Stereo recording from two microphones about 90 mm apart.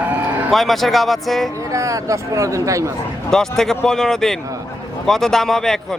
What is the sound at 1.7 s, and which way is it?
Speech, 35° right (ahead or behind).